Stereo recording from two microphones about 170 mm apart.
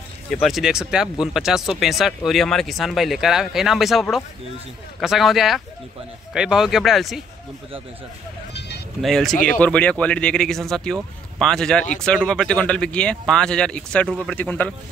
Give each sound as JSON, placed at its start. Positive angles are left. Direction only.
{"t": 0.3, "sound": "speech", "side_deg": 0}
{"t": 8.5, "sound": "music", "side_deg": 75}
{"t": 9.0, "sound": "speech", "side_deg": 0}